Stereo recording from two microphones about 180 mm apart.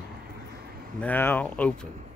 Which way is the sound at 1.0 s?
10° left (ahead or behind).